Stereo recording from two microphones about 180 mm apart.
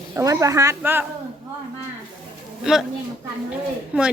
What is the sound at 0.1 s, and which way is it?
Speech, 15° right (ahead or behind).